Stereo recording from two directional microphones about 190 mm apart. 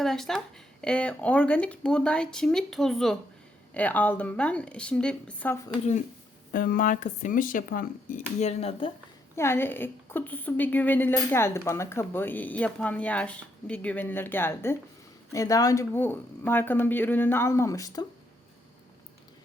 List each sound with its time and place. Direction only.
0.0 s a woman's voice: centre (ahead or behind)
5.6 s speech: 35° left (ahead or behind)
6.5 s speech: 50° left (ahead or behind); by 8.9 s 35° left (ahead or behind)
9.3 s a woman's voice: 15° left (ahead or behind)